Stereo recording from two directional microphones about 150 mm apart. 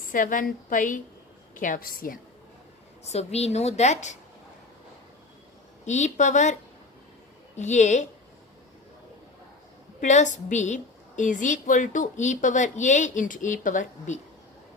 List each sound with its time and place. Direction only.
0.1 s a woman's voice: 65° left (ahead or behind)
3.0 s a woman's voice: 45° left (ahead or behind)
5.8 s a woman's voice: 50° left (ahead or behind)
10.0 s a woman's voice: 55° left (ahead or behind)